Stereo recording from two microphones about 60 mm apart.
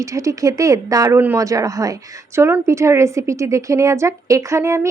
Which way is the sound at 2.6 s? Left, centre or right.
Right.